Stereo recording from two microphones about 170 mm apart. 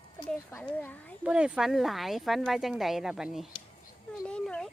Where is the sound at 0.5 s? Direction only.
10° left (ahead or behind).